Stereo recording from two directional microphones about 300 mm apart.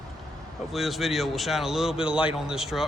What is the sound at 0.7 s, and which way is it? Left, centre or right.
Speech, centre.